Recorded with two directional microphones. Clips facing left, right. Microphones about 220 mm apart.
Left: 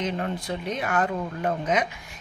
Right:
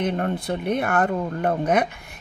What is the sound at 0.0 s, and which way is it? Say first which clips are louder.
A woman's voice: right 4 dB; 55° right (ahead or behind).